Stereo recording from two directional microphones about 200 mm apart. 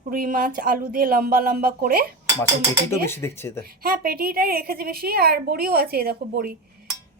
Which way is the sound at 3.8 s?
50° right (ahead or behind).